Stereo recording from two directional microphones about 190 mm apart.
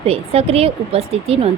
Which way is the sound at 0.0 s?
30° right (ahead or behind).